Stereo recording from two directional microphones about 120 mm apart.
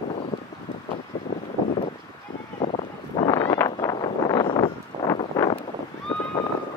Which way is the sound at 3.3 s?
35° left (ahead or behind).